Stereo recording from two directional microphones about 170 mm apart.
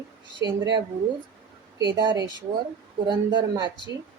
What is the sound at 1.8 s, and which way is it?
Speech, 25° right (ahead or behind).